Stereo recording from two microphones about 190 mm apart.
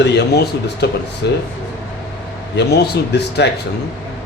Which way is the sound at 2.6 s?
60° left (ahead or behind).